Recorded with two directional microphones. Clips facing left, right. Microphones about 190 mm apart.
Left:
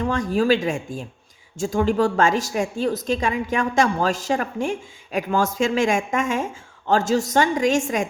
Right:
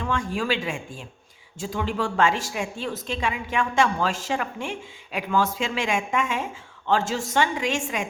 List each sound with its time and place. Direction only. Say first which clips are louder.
0.0 s a woman's voice: left 6 dB; 40° left (ahead or behind)